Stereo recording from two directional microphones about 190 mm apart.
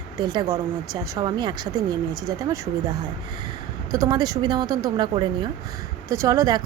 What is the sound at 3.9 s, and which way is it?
Speech, 20° right (ahead or behind).